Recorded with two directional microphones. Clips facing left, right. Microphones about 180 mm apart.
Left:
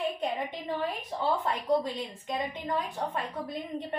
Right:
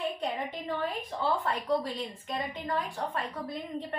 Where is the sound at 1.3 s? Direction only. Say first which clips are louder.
Left 2 dB; 20° left (ahead or behind).